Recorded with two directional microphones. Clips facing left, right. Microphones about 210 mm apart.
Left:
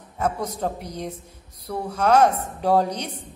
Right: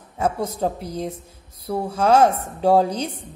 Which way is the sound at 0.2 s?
30° right (ahead or behind).